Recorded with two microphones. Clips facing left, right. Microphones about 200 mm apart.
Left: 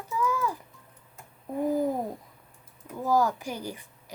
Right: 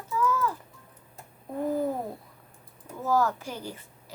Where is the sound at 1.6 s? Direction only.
10° left (ahead or behind).